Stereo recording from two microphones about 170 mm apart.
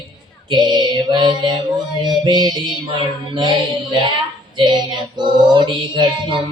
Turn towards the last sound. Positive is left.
turn(degrees=-30)  # may be behind; listen again after turning